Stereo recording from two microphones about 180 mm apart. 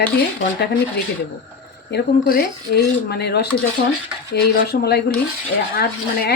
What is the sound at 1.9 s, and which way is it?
Speech, 60° left (ahead or behind).